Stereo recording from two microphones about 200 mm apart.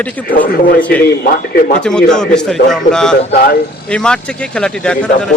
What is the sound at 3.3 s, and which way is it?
Speech, 50° left (ahead or behind).